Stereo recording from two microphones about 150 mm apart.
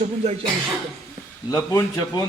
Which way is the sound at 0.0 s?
45° right (ahead or behind).